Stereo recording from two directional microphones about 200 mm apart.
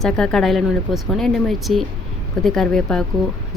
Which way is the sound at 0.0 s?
5° left (ahead or behind).